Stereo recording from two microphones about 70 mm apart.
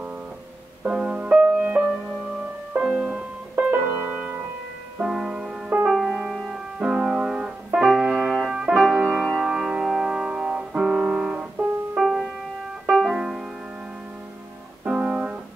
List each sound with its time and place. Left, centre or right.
0.8 s music: centre
3.7 s music: right
5.0 s music: centre
6.8 s music: centre
12.0 s music: centre
14.9 s music: centre